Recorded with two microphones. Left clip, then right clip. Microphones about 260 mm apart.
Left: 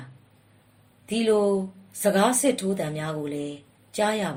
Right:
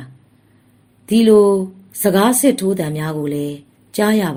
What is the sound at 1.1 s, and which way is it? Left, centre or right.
Speech, right.